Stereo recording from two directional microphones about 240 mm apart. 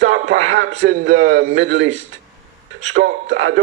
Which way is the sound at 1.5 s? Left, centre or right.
Right.